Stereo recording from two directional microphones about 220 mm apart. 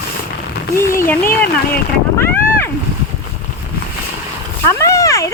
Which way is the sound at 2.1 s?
10° left (ahead or behind).